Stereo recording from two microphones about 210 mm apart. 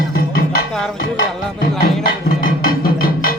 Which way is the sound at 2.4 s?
45° left (ahead or behind).